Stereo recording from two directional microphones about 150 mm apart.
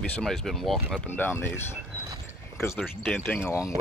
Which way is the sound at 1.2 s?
15° left (ahead or behind).